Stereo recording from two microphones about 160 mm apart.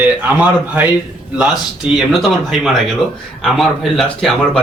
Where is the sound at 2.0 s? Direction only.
Centre (ahead or behind).